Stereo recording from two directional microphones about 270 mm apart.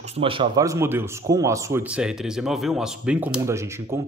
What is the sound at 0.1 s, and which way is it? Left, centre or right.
A man's voice, centre.